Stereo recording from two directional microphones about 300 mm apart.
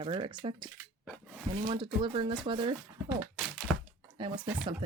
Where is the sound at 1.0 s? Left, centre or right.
Centre.